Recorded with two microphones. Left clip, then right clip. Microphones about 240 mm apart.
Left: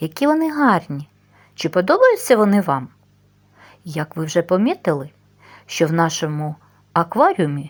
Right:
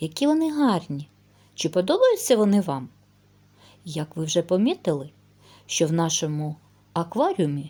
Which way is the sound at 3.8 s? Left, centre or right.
Centre.